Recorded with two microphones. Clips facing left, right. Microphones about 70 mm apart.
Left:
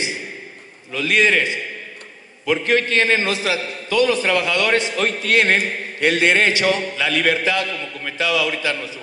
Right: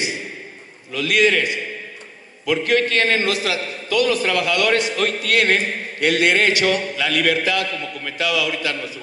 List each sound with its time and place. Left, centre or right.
0.9 s a man's voice: left